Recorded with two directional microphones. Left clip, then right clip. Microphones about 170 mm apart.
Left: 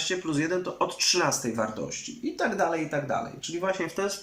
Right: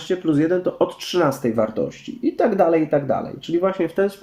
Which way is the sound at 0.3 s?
45° right (ahead or behind).